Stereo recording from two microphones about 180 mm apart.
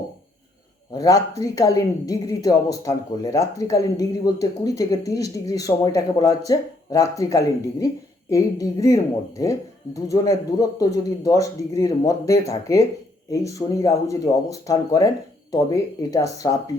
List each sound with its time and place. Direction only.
0.9 s a woman's voice: 20° left (ahead or behind)
10.1 s a woman's voice: 20° left (ahead or behind)